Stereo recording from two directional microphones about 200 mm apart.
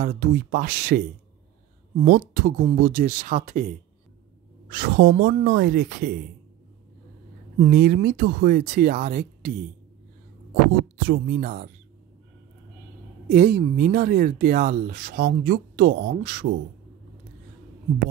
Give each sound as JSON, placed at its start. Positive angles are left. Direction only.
{"t": 0.0, "sound": "speech", "side_deg": -50}
{"t": 2.0, "sound": "speech", "side_deg": -50}
{"t": 4.6, "sound": "speech", "side_deg": -50}
{"t": 7.5, "sound": "speech", "side_deg": -45}
{"t": 11.1, "sound": "speech", "side_deg": -50}
{"t": 13.3, "sound": "speech", "side_deg": -45}